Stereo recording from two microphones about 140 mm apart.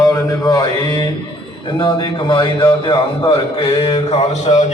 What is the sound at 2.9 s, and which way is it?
A man's voice, 35° left (ahead or behind).